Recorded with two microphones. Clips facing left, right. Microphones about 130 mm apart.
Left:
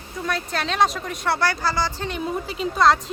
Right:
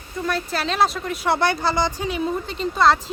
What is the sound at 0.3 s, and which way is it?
Speech, centre (ahead or behind).